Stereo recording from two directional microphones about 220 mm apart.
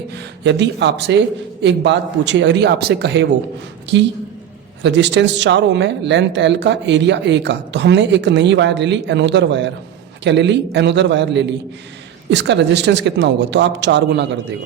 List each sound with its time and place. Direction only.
0.1 s speech: 50° right (ahead or behind)